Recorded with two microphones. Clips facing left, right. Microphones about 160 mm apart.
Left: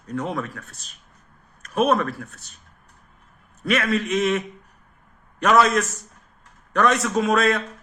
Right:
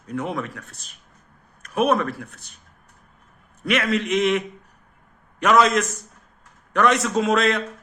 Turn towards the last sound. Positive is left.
turn(degrees=-25)  # may be behind; listen again after turning